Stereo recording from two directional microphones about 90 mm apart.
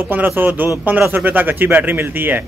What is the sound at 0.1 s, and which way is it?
A man's voice, 20° right (ahead or behind).